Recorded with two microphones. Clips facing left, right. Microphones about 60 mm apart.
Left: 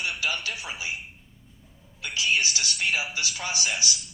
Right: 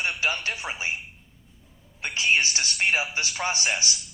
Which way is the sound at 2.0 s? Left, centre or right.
Right.